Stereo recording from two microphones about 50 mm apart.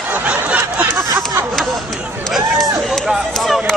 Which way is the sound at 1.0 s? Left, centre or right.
Right.